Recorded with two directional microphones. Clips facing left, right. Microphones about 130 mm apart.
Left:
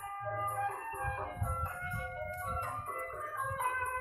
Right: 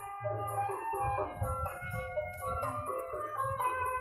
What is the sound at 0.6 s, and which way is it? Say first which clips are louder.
Music: right 4 dB; 35° right (ahead or behind).